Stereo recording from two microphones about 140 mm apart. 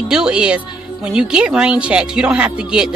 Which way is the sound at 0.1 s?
5° right (ahead or behind).